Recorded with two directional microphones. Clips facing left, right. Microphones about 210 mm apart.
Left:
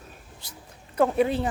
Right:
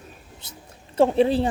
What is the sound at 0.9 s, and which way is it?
Speech, 30° right (ahead or behind).